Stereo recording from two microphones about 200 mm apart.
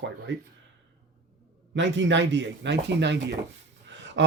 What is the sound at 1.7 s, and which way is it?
Speech, 65° right (ahead or behind).